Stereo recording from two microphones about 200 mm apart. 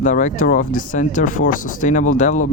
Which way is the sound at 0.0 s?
40° left (ahead or behind).